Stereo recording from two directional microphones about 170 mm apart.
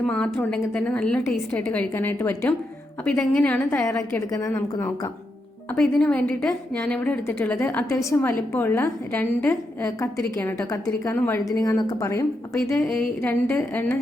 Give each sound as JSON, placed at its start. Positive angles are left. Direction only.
{"t": 0.0, "sound": "a woman's voice", "side_deg": 10}
{"t": 5.7, "sound": "a woman's voice", "side_deg": 5}